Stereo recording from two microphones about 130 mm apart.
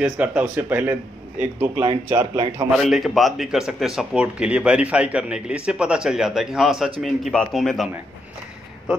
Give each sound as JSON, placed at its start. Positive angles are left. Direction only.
{"t": 0.0, "sound": "speech", "side_deg": -10}
{"t": 2.8, "sound": "speech", "side_deg": 0}